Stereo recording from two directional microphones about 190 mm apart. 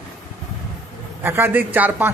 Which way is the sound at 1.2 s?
10° right (ahead or behind).